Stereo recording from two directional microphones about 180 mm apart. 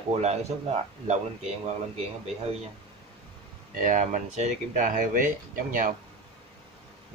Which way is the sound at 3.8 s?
45° right (ahead or behind).